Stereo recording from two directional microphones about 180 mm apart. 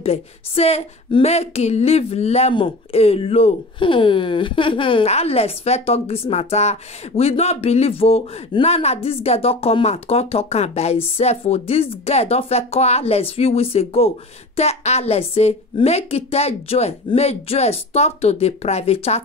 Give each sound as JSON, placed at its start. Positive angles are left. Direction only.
{"t": 0.0, "sound": "speech", "side_deg": 35}